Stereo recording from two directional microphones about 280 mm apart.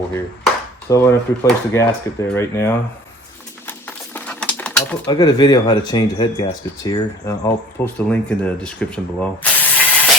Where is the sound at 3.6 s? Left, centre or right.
Centre.